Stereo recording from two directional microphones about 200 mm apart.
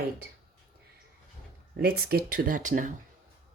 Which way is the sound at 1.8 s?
50° right (ahead or behind).